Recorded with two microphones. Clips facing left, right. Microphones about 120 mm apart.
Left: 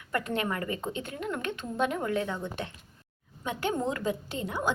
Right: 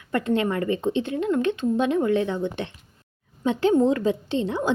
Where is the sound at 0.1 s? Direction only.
25° right (ahead or behind).